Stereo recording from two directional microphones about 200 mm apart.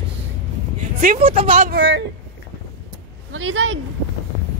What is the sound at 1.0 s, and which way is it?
Speech, 30° right (ahead or behind).